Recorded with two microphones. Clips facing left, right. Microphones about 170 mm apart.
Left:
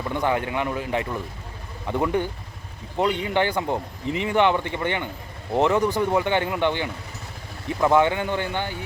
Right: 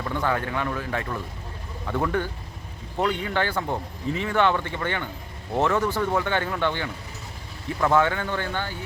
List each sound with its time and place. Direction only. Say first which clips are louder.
0.1 s speech: left 2 dB; 15° left (ahead or behind)